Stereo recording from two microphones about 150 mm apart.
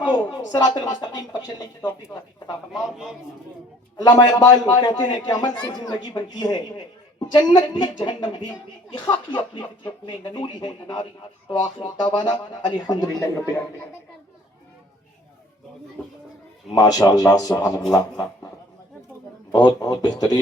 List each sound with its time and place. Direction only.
0.0 s a woman's voice: 30° left (ahead or behind)
2.7 s a man's voice: 5° right (ahead or behind)
3.9 s a man's voice: 25° left (ahead or behind)
16.7 s a man's voice: 25° left (ahead or behind)
19.5 s a man's voice: 25° left (ahead or behind)